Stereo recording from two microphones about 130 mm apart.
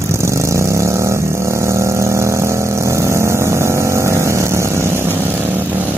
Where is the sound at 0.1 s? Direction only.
20° right (ahead or behind).